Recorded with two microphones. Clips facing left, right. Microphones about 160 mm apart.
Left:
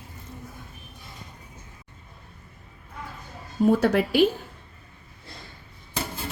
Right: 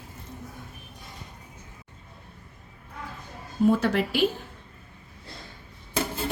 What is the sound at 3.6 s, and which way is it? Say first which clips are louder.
Speech: left 2 dB; 45° left (ahead or behind).